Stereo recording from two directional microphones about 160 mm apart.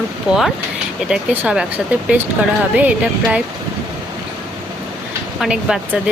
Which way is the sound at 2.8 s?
5° right (ahead or behind).